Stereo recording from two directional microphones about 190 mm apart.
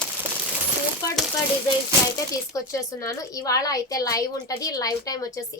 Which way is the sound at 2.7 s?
15° left (ahead or behind).